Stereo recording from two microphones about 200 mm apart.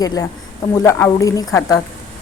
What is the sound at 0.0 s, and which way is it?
A woman's voice, 20° left (ahead or behind).